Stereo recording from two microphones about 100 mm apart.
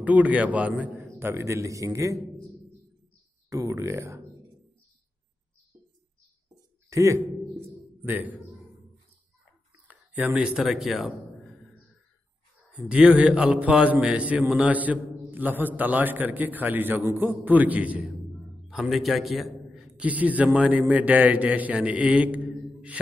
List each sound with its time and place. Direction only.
0.0 s a man's voice: 15° right (ahead or behind); by 2.2 s 30° right (ahead or behind)
3.4 s speech: 35° right (ahead or behind)
6.5 s a sound: 35° right (ahead or behind)
8.0 s a man's voice: 20° right (ahead or behind)
9.8 s speech: 15° right (ahead or behind)
12.7 s a man's voice: 10° right (ahead or behind)
18.7 s a man's voice: centre (ahead or behind)